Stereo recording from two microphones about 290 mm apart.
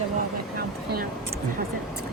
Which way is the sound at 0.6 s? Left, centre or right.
Right.